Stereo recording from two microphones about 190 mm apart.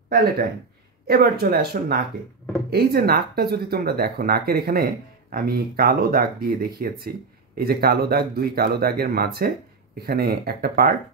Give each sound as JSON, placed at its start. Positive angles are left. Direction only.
{"t": 0.1, "sound": "speech", "side_deg": -55}